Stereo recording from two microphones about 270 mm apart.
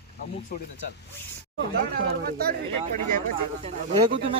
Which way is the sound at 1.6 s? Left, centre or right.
Right.